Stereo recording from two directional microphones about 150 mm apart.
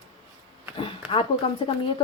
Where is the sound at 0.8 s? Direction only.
35° left (ahead or behind).